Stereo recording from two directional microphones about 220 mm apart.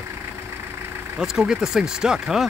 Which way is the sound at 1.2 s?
5° right (ahead or behind).